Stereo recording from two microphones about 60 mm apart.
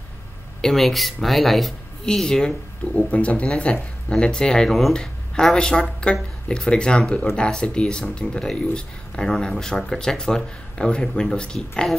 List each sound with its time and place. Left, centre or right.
0.6 s speech: centre
3.0 s speech: left
4.6 s speech: centre